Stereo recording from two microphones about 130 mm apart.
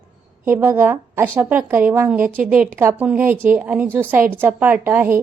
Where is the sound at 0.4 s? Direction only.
20° right (ahead or behind).